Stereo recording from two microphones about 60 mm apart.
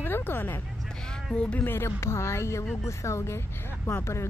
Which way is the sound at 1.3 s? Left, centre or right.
Centre.